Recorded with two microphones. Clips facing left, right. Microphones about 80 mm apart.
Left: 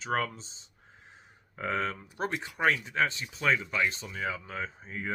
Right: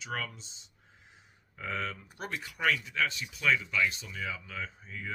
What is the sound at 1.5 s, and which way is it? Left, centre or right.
Speech, left.